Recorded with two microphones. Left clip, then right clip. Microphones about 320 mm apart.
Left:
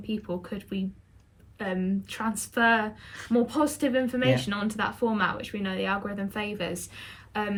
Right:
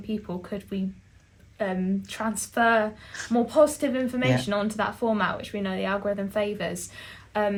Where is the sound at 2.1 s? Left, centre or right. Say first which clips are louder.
Right 1 dB; centre.